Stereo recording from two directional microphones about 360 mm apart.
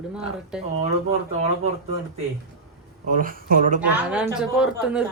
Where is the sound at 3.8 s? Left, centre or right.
Centre.